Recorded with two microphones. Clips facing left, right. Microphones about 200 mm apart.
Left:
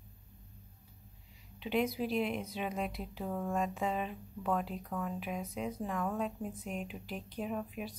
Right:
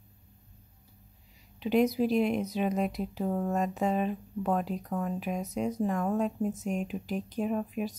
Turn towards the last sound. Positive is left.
turn(degrees=-45)  # may be behind; listen again after turning